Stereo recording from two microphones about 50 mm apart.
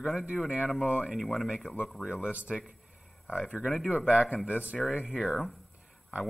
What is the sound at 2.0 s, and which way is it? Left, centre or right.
Speech, centre.